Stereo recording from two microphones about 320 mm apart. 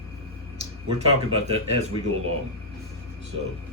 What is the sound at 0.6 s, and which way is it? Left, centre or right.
Speech, centre.